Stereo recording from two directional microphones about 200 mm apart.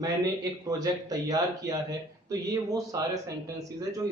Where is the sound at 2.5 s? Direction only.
15° right (ahead or behind).